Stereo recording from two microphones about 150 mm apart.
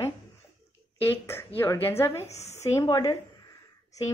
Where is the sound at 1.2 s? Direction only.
15° left (ahead or behind).